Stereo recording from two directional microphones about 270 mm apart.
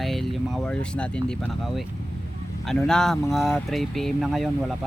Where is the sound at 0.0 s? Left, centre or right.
Centre.